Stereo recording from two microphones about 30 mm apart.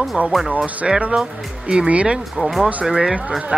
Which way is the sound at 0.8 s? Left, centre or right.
Centre.